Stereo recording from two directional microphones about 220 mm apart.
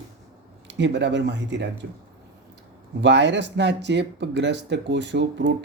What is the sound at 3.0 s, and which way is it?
Speech, 55° right (ahead or behind).